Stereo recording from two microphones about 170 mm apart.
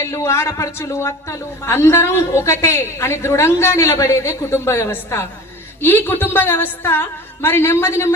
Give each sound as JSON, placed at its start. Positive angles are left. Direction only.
{"t": 0.0, "sound": "speech", "side_deg": 15}